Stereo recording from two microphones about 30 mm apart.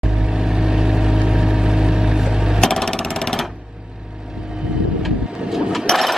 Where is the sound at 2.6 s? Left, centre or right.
Centre.